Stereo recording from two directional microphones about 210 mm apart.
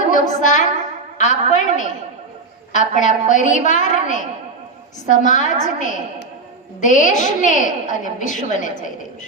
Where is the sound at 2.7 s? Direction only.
35° left (ahead or behind).